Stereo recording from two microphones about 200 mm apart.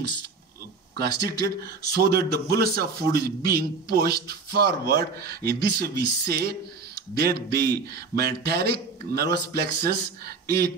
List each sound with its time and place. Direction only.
0.9 s speech: 55° right (ahead or behind)